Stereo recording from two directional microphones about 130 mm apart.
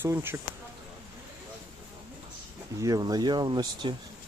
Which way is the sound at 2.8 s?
30° right (ahead or behind).